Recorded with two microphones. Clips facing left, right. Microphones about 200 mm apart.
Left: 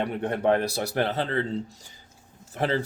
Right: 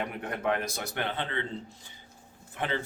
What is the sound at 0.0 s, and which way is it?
Speech, 35° left (ahead or behind).